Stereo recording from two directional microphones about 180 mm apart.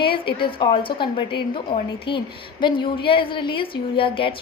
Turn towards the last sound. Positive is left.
turn(degrees=30)  # may be behind; listen again after turning